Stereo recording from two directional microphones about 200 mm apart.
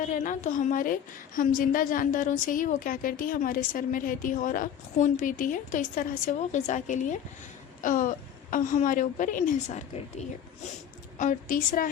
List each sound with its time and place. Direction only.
0.0 s a woman's voice: 40° left (ahead or behind)